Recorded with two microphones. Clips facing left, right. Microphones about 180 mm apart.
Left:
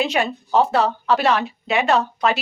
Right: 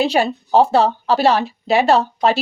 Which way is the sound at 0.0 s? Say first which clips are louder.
Right 4 dB; 35° right (ahead or behind).